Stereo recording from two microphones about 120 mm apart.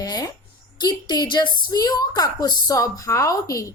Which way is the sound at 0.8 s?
35° left (ahead or behind).